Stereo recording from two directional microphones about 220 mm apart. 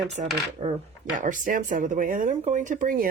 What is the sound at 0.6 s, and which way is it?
Speech, 20° right (ahead or behind).